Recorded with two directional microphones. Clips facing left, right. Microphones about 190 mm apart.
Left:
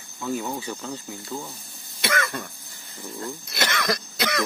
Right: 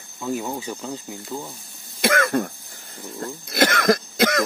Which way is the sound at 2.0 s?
50° right (ahead or behind).